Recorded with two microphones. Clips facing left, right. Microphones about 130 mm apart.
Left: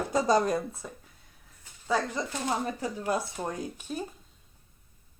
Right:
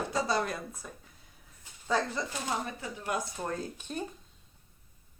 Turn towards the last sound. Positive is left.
turn(degrees=10)  # may be behind; listen again after turning